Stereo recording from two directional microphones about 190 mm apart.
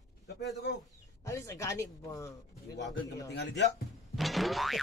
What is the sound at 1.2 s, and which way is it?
Speech, 15° left (ahead or behind).